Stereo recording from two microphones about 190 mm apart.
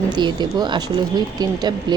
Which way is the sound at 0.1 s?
20° right (ahead or behind).